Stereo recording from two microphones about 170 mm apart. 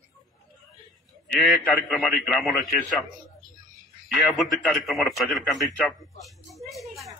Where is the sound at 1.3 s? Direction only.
Centre (ahead or behind).